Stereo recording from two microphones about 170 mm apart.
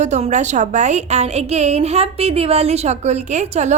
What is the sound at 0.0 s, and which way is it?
A woman's voice, 45° right (ahead or behind).